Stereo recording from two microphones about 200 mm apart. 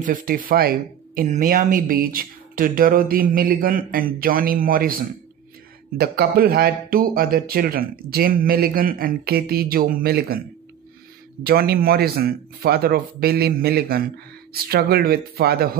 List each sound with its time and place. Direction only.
0.0 s speech: 45° right (ahead or behind)
11.4 s speech: 50° right (ahead or behind)